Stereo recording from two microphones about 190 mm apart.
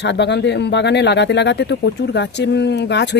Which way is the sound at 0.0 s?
65° left (ahead or behind).